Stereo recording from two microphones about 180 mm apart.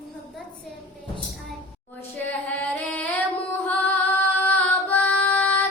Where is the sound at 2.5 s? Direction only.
10° left (ahead or behind).